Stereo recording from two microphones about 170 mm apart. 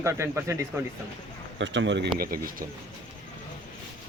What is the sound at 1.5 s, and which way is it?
Speech, 90° right.